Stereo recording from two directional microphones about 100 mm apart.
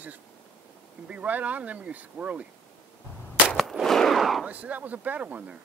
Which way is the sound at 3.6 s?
Centre (ahead or behind).